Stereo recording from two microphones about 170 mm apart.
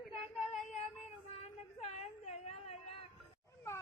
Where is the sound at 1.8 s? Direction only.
40° left (ahead or behind).